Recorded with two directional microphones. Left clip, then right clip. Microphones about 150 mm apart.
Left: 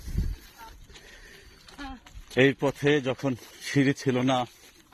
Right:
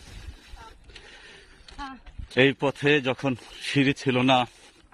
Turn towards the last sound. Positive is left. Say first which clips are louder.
# right 4 dB
turn(degrees=-30)  # may be behind; listen again after turning